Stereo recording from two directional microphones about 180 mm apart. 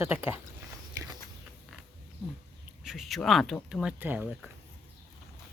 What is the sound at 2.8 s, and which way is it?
Speech, centre (ahead or behind).